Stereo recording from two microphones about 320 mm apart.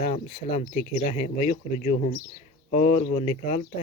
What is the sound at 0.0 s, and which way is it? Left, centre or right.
Speech, left.